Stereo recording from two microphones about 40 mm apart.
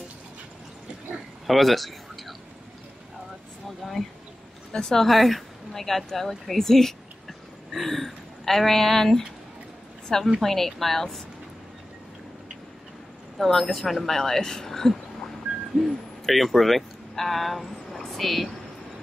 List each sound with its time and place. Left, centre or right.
1.5 s a sound: centre
3.6 s a sound: centre
4.7 s speech: centre
5.0 s a woman's voice: centre
13.4 s speech: centre
15.8 s hoot: centre